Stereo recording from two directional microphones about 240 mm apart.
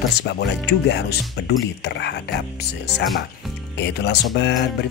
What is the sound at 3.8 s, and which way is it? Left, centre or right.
Speech, left.